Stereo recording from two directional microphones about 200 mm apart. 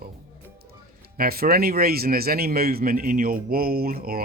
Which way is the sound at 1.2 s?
50° right (ahead or behind).